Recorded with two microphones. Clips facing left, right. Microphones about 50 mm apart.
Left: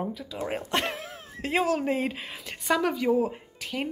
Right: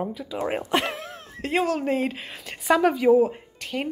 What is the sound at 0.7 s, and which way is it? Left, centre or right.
A woman's voice, centre.